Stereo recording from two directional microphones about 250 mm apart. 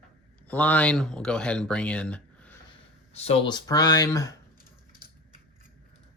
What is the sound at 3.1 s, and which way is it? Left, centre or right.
Speech, left.